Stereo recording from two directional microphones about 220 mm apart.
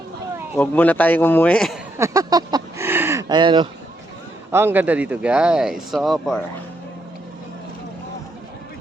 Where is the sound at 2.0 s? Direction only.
15° right (ahead or behind).